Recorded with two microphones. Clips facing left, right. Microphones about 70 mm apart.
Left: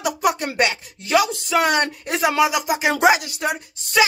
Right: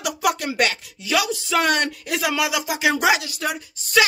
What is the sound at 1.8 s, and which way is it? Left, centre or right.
Speech, left.